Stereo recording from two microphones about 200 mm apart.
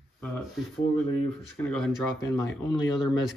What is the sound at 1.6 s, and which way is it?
Speech, 10° left (ahead or behind).